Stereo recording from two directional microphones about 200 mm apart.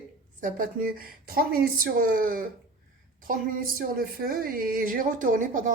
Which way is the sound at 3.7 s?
45° right (ahead or behind).